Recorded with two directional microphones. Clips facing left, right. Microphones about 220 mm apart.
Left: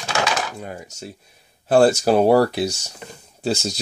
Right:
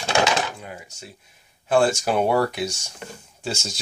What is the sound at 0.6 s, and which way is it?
Speech, 40° left (ahead or behind).